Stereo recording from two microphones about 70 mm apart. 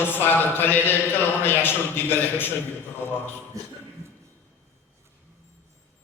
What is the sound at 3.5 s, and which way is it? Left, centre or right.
Speech, right.